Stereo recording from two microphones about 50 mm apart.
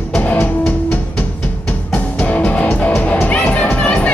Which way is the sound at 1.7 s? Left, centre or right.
Left.